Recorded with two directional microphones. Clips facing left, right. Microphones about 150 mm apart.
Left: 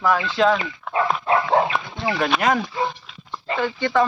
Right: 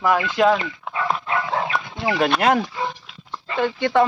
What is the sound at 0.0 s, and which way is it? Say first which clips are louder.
Speech: right 1 dB; 15° right (ahead or behind).